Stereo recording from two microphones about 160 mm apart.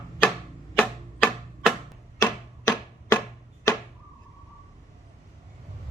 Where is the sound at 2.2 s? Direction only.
20° left (ahead or behind).